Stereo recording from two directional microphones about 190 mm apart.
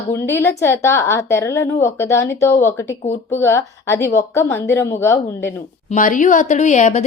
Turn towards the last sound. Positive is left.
turn(degrees=35)  # may be behind; listen again after turning